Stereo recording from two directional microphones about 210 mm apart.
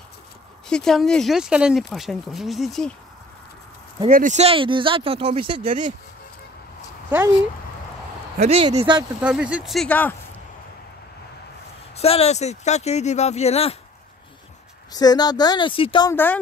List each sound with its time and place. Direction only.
0.7 s speech: 5° left (ahead or behind)
4.1 s speech: 35° right (ahead or behind)
7.1 s speech: 10° right (ahead or behind)
8.4 s speech: 25° right (ahead or behind)
9.2 s speech: 5° right (ahead or behind)
12.0 s speech: 30° left (ahead or behind)
14.9 s a woman's voice: 20° left (ahead or behind)